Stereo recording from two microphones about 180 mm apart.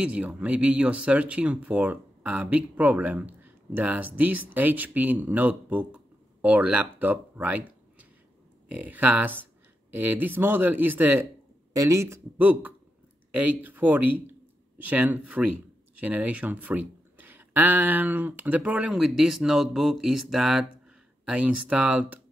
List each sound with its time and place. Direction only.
0.0 s speech: 5° right (ahead or behind)